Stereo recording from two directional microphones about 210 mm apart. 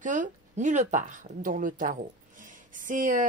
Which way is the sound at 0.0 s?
35° right (ahead or behind).